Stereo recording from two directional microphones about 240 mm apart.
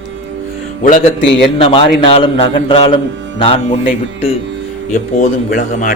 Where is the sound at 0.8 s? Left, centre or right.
Left.